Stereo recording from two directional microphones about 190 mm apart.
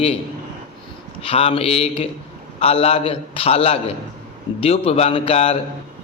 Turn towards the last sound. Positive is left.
turn(degrees=30)  # may be behind; listen again after turning